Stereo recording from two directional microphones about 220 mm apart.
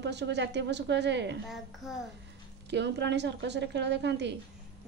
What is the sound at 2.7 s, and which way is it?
A woman's voice, 50° right (ahead or behind).